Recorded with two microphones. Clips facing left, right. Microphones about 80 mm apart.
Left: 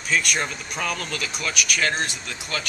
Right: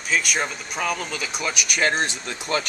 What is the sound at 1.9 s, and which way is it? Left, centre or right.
Speech, right.